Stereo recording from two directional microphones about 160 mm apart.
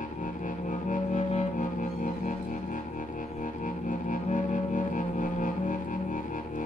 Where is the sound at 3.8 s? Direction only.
55° left (ahead or behind).